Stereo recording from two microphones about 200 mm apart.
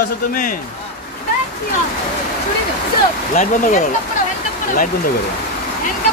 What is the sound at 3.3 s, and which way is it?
Speech, 40° left (ahead or behind).